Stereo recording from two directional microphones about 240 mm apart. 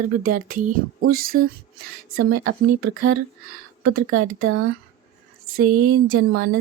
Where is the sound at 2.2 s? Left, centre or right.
Right.